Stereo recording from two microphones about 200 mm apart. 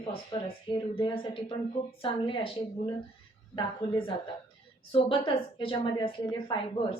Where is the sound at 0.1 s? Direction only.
25° left (ahead or behind).